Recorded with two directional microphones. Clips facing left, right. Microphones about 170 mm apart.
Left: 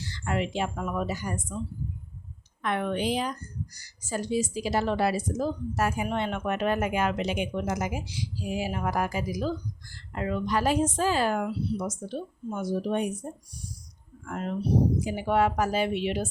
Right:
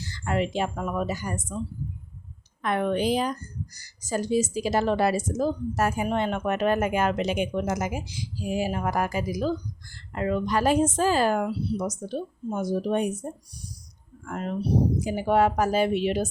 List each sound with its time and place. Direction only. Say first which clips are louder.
0.0 s a woman's voice: right 3 dB; 40° right (ahead or behind)
2.6 s a woman's voice: right 3 dB; 40° right (ahead or behind)
15.0 s a woman's voice: right 3 dB; 40° right (ahead or behind)